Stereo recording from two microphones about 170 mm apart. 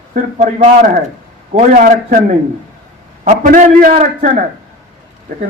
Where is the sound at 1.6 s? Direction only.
55° right (ahead or behind).